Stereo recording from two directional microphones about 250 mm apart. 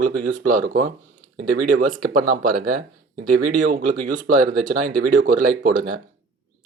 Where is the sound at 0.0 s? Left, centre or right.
Right.